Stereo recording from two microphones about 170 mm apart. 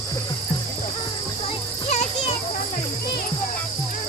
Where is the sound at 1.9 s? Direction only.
40° left (ahead or behind).